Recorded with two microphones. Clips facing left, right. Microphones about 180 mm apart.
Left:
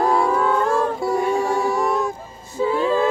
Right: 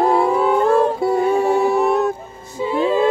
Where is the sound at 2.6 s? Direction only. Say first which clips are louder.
Right 1 dB; 20° right (ahead or behind).